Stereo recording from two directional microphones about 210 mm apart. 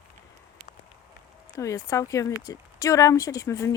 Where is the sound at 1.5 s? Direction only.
15° left (ahead or behind).